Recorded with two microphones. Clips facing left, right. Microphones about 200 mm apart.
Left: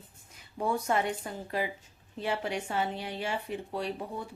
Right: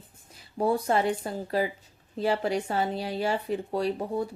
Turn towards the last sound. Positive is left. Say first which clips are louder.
# right 7 dB
turn(degrees=-40)  # may be behind; listen again after turning